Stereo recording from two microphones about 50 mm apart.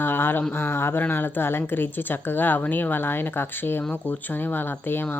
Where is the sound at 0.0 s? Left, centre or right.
Left.